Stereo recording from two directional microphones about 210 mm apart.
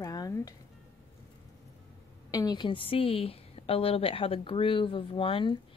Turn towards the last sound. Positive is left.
turn(degrees=25)  # may be behind; listen again after turning